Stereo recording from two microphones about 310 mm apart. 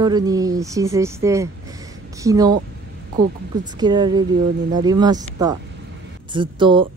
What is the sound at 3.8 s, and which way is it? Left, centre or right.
Speech, centre.